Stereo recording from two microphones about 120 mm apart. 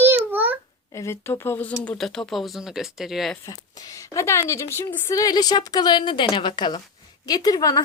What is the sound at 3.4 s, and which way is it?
A woman's voice, 30° left (ahead or behind).